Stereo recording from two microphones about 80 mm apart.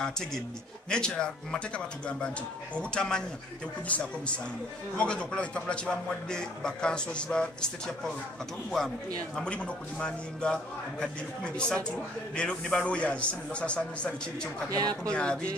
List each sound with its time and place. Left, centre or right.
0.0 s a man's voice: centre
14.7 s speech: right
15.0 s a man's voice: centre